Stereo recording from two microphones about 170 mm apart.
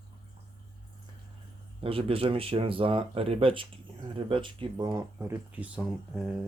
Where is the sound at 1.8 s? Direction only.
35° right (ahead or behind).